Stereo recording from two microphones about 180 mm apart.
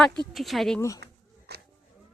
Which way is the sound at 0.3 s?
Centre (ahead or behind).